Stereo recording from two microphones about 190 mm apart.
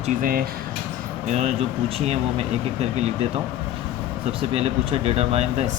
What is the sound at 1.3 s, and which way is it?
Speech, 35° right (ahead or behind).